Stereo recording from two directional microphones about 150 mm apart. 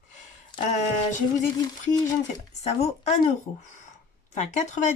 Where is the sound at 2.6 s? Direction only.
50° left (ahead or behind).